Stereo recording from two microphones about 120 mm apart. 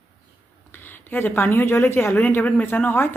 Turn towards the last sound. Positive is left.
turn(degrees=20)  # may be behind; listen again after turning